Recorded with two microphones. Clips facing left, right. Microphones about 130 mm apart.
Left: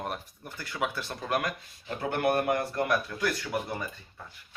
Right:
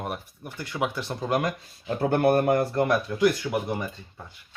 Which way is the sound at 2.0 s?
40° right (ahead or behind).